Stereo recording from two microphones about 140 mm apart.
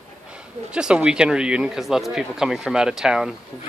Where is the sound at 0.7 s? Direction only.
5° right (ahead or behind).